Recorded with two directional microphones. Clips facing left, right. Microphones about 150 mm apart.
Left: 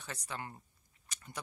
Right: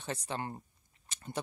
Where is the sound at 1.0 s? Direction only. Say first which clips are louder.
Right 7 dB; 30° right (ahead or behind).